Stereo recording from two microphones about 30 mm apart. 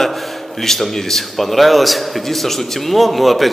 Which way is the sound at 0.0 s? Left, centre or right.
Centre.